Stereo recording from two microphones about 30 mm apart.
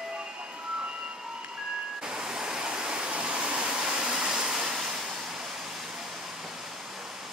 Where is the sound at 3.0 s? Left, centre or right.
Right.